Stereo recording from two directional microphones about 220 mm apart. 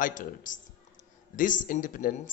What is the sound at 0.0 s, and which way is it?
Speech, 35° left (ahead or behind).